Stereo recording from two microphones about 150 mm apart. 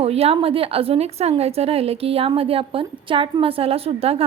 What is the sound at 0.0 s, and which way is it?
A woman's voice, 45° right (ahead or behind).